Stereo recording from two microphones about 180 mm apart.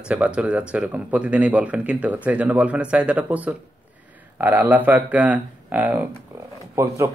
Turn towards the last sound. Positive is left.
turn(degrees=-15)  # may be behind; listen again after turning